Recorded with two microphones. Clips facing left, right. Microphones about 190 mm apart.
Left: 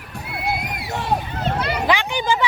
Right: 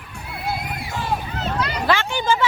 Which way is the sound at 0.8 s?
65° left (ahead or behind).